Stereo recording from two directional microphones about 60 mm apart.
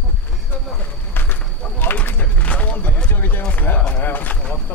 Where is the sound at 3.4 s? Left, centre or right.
Left.